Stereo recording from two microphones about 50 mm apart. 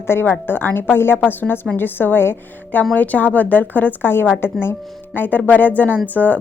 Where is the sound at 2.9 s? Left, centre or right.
Left.